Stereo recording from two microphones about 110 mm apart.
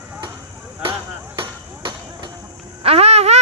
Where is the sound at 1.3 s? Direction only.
45° right (ahead or behind).